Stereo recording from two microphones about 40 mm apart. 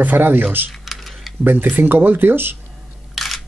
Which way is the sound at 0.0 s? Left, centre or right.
Right.